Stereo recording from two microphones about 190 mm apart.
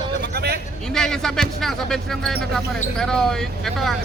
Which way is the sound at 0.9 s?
5° left (ahead or behind).